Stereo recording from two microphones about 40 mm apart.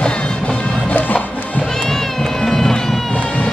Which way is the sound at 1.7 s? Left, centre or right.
Centre.